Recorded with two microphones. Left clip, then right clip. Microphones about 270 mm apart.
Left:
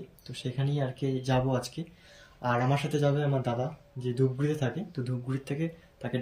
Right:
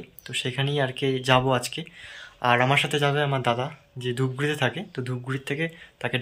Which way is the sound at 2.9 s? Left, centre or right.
Centre.